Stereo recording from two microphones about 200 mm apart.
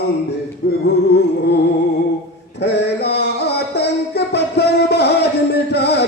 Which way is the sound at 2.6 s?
60° left (ahead or behind).